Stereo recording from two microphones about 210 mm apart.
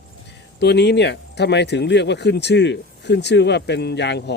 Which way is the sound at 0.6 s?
55° left (ahead or behind).